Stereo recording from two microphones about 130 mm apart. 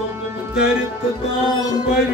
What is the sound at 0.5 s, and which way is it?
Music, 5° right (ahead or behind).